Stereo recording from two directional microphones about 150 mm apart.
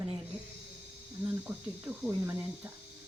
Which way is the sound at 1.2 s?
15° right (ahead or behind).